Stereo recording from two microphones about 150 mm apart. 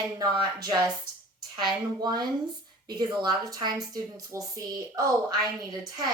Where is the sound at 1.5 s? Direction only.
30° right (ahead or behind).